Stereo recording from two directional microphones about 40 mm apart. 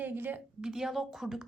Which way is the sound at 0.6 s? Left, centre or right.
Centre.